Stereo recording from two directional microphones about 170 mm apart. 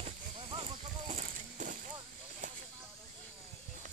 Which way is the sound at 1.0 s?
45° right (ahead or behind).